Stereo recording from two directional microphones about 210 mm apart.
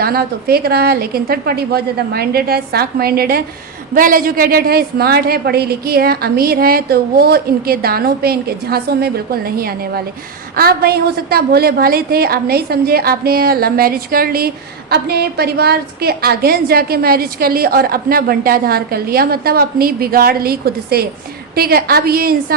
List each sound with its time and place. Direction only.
0.0 s a woman's voice: 45° right (ahead or behind)